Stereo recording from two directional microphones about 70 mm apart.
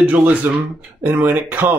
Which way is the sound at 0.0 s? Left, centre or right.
Right.